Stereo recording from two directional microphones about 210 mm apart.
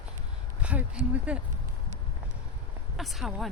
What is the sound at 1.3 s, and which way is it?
Speech, 5° right (ahead or behind).